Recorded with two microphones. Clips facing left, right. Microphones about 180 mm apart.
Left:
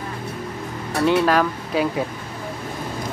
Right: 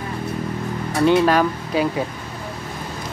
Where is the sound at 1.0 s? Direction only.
Centre (ahead or behind).